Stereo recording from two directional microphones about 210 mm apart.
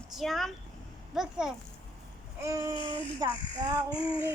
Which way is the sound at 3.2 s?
20° right (ahead or behind).